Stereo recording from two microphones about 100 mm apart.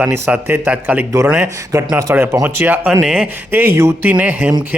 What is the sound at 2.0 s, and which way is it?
Speech, 30° right (ahead or behind).